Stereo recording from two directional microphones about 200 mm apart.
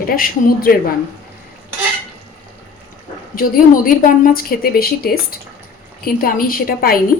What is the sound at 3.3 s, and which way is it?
A woman's voice, 45° left (ahead or behind).